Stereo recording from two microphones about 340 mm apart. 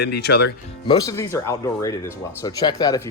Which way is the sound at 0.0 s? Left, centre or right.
Left.